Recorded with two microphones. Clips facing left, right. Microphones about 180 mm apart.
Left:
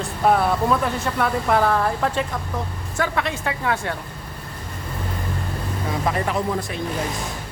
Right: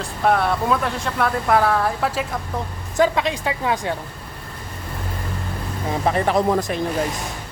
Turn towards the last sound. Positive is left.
turn(degrees=-40)  # may be behind; listen again after turning